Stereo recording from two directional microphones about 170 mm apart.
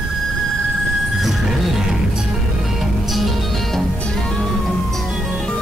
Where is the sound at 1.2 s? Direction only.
Centre (ahead or behind).